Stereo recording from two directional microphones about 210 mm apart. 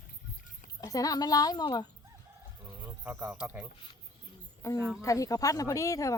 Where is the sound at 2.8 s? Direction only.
10° right (ahead or behind).